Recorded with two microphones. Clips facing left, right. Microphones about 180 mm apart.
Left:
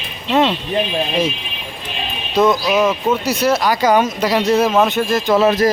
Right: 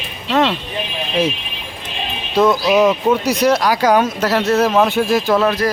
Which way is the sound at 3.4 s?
5° left (ahead or behind).